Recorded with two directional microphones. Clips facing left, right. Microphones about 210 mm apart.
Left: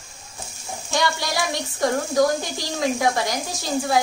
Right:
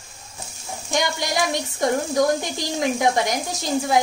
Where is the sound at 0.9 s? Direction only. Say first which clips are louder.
Even; 20° right (ahead or behind).